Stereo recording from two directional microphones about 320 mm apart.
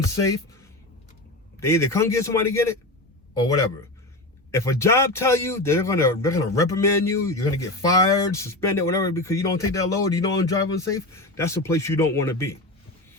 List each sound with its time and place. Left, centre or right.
0.1 s speech: centre
1.5 s speech: centre
4.5 s speech: centre